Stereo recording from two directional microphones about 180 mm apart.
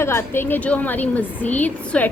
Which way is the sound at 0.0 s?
15° left (ahead or behind).